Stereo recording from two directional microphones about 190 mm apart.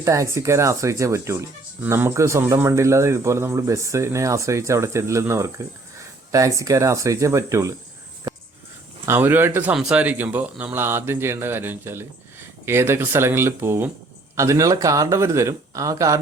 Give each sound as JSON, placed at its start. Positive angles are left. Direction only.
{"t": 0.0, "sound": "speech", "side_deg": -15}
{"t": 9.0, "sound": "speech", "side_deg": -10}